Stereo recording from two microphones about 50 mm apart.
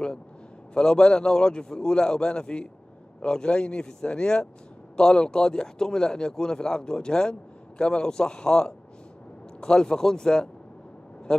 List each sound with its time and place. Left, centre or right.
0.7 s speech: centre